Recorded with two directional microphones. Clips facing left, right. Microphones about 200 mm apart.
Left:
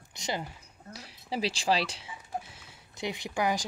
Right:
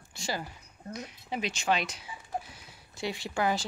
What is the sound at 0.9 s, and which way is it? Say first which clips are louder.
Speech: left 1 dB; 30° left (ahead or behind).